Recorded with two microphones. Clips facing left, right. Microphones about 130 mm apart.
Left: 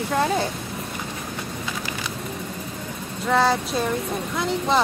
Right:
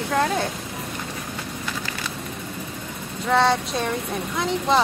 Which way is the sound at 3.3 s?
Centre (ahead or behind).